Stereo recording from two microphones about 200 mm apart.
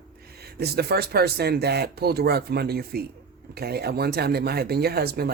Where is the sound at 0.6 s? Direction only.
50° right (ahead or behind).